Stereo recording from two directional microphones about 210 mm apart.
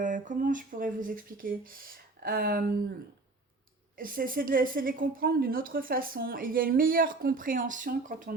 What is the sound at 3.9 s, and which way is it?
A woman's voice, 40° right (ahead or behind).